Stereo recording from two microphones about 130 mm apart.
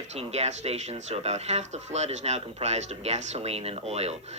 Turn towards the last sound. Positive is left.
turn(degrees=-55)  # may be behind; listen again after turning